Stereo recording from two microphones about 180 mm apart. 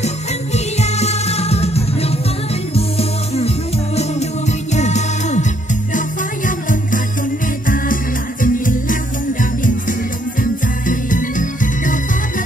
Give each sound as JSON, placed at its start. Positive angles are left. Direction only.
{"t": 0.7, "sound": "music", "side_deg": 35}
{"t": 10.4, "sound": "music", "side_deg": 50}